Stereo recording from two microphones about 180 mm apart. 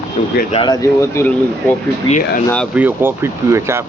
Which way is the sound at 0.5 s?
25° left (ahead or behind).